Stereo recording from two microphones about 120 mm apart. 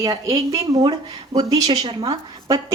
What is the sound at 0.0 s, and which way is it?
A woman's voice, 30° right (ahead or behind).